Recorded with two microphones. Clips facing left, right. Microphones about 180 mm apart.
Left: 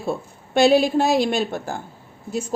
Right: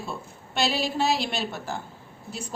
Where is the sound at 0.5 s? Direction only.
50° left (ahead or behind).